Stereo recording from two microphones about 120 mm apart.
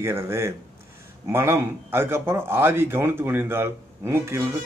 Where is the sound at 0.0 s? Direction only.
20° right (ahead or behind).